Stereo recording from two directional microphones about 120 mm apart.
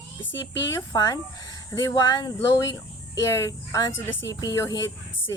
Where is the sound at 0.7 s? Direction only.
30° left (ahead or behind).